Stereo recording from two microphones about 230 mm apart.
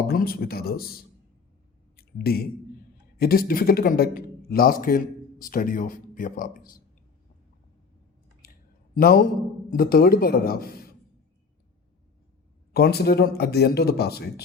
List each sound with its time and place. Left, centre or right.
0.1 s speech: left
2.0 s speech: left
9.0 s speech: left
12.7 s speech: left